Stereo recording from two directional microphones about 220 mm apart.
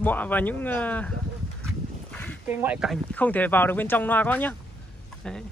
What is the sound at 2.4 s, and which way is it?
Speech, 5° right (ahead or behind).